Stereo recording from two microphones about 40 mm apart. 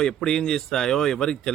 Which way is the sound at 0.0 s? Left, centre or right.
Centre.